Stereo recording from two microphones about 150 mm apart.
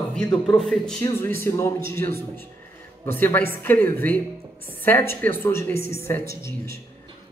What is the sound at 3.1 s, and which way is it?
A woman's voice, 15° left (ahead or behind).